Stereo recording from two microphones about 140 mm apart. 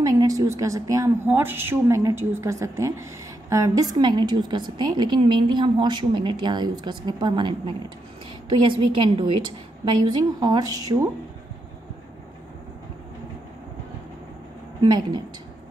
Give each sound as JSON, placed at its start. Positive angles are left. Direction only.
{"t": 0.0, "sound": "a woman's voice", "side_deg": -25}
{"t": 14.8, "sound": "a woman's voice", "side_deg": -30}